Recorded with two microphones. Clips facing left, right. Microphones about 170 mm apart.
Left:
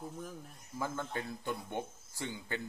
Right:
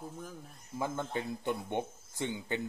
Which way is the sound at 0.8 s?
20° right (ahead or behind).